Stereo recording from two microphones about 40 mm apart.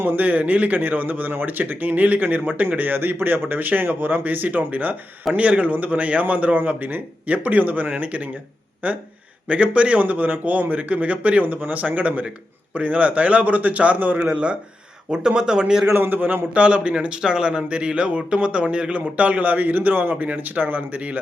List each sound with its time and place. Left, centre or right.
0.2 s a man's voice: right
10.0 s speech: right
14.3 s speech: right
15.9 s a man's voice: right
16.6 s a man's voice: right